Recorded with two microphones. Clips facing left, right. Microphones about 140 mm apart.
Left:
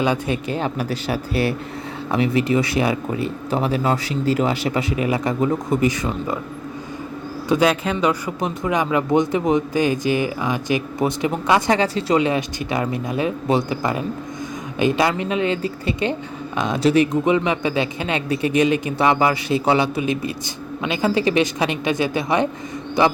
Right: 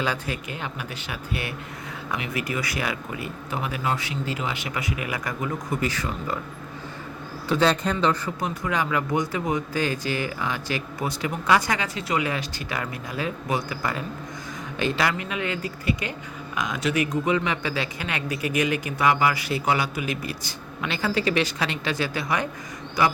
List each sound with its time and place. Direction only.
0.0 s speech: 20° left (ahead or behind)
7.4 s speech: 15° left (ahead or behind)